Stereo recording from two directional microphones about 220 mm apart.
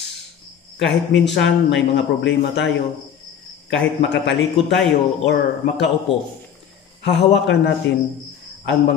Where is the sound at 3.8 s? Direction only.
55° left (ahead or behind).